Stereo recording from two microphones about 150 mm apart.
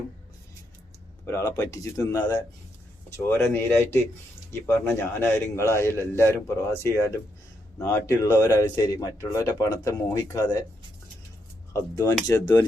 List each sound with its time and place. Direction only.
1.2 s a man's voice: 20° left (ahead or behind)
11.7 s a man's voice: 20° left (ahead or behind)